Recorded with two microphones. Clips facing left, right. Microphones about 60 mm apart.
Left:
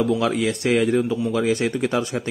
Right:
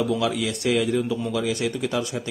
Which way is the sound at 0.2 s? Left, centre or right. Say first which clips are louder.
Left 3 dB; left.